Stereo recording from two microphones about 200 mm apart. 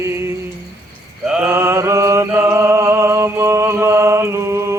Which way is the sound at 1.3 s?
10° right (ahead or behind).